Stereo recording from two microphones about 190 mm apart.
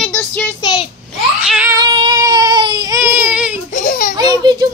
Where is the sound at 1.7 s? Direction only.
25° right (ahead or behind); by 3.6 s 5° right (ahead or behind).